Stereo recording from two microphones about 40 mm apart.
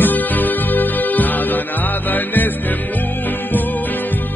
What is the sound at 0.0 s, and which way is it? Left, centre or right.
Music, left.